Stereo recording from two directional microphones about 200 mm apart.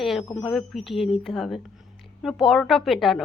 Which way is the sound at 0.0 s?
Centre (ahead or behind).